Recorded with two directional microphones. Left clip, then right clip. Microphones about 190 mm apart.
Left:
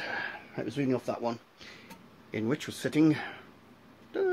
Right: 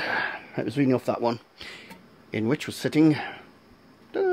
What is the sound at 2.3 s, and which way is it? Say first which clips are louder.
Speech: right 5 dB; 40° right (ahead or behind).